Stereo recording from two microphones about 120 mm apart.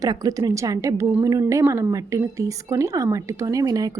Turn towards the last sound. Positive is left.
turn(degrees=-30)  # may be behind; listen again after turning